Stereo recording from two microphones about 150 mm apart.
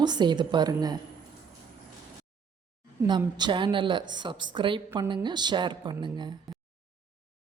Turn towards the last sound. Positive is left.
turn(degrees=-30)  # may be behind; listen again after turning